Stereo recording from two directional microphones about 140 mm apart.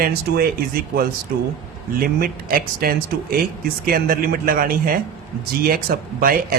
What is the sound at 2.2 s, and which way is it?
A man's voice, 90° right.